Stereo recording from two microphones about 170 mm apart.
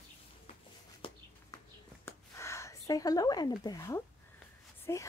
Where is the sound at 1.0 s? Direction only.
30° left (ahead or behind).